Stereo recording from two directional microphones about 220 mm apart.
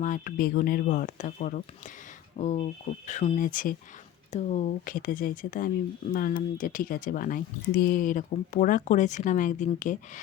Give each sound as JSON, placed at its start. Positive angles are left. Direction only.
{"t": 0.0, "sound": "speech", "side_deg": 35}